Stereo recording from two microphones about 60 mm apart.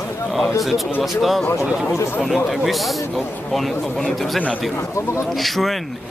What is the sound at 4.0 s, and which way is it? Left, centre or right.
Speech, centre.